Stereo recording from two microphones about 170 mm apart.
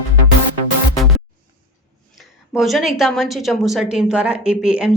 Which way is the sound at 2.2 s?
Centre (ahead or behind).